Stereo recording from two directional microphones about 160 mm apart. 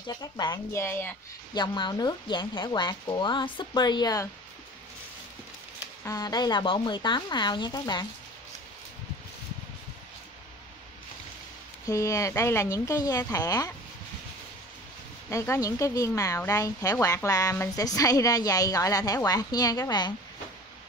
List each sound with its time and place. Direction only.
0.0 s a woman's voice: 25° left (ahead or behind)
1.5 s a woman's voice: 25° left (ahead or behind)
6.0 s a woman's voice: 25° left (ahead or behind)
11.8 s a woman's voice: 20° left (ahead or behind)
15.2 s a woman's voice: 15° left (ahead or behind)